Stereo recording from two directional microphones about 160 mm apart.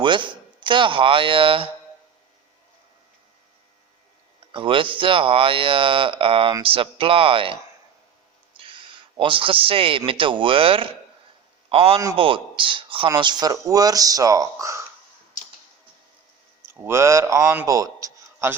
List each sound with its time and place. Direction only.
0.0 s speech: 30° right (ahead or behind)
4.5 s speech: 30° right (ahead or behind)
8.5 s a sound: 30° right (ahead or behind)
10.1 s a man's voice: 30° right (ahead or behind)
16.6 s a man's voice: 15° right (ahead or behind)